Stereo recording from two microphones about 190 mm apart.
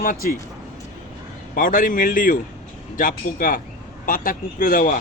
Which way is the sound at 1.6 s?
45° left (ahead or behind).